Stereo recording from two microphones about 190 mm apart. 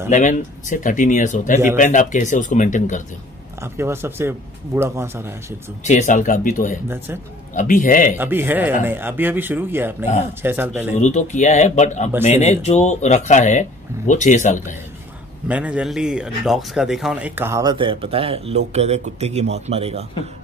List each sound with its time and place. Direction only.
0.1 s speech: 40° left (ahead or behind)
3.6 s speech: 15° right (ahead or behind)
5.9 s speech: 40° left (ahead or behind)
8.2 s speech: 10° right (ahead or behind)
11.0 s speech: 40° left (ahead or behind)
15.4 s a man's voice: 5° right (ahead or behind); by 20.1 s 30° right (ahead or behind)